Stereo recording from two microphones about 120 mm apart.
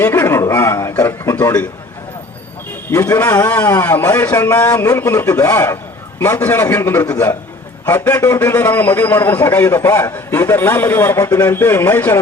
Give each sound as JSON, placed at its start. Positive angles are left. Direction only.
{"t": 0.0, "sound": "a man's voice", "side_deg": 20}
{"t": 2.9, "sound": "a man's voice", "side_deg": 20}